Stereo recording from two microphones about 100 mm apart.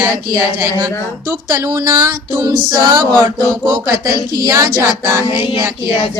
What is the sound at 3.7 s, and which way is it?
Speech, 40° right (ahead or behind).